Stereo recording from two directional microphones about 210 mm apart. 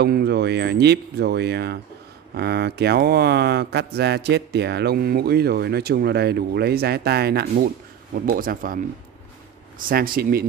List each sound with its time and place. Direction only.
0.0 s speech: 50° right (ahead or behind)
9.8 s speech: 45° right (ahead or behind)